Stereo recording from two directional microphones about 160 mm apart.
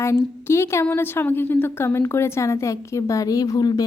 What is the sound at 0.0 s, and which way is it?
A woman's voice, 15° left (ahead or behind).